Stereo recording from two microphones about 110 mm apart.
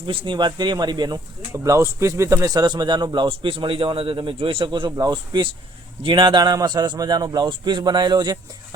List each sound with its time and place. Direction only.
0.1 s speech: 50° right (ahead or behind)
1.5 s speech: 25° right (ahead or behind); by 4.9 s 50° right (ahead or behind)
4.9 s a man's voice: 35° right (ahead or behind)